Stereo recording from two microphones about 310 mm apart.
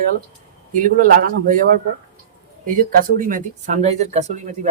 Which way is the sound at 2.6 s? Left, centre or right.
Right.